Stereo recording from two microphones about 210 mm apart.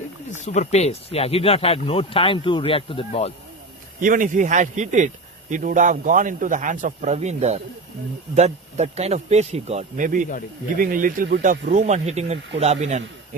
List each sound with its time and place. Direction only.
0.4 s speech: 35° left (ahead or behind)
4.0 s a man's voice: 40° right (ahead or behind)